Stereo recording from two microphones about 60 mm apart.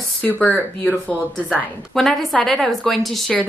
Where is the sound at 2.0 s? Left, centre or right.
Centre.